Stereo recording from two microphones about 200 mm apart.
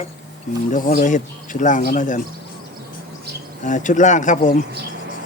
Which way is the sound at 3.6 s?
40° left (ahead or behind).